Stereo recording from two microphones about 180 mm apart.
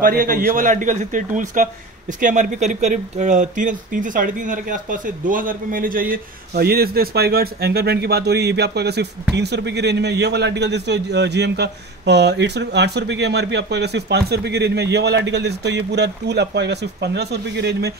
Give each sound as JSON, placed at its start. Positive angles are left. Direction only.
{"t": 0.0, "sound": "a man's voice", "side_deg": -50}